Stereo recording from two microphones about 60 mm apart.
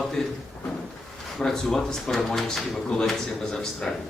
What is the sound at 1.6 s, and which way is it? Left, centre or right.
Speech, centre.